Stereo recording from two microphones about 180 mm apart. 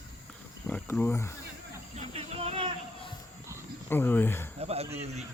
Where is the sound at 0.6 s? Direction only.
10° left (ahead or behind).